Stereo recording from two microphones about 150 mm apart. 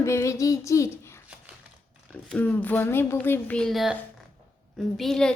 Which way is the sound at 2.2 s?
10° left (ahead or behind).